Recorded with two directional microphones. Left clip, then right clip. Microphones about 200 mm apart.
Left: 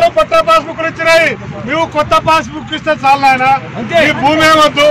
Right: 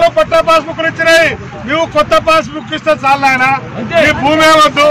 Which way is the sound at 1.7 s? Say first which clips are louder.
Right 1 dB; 15° right (ahead or behind).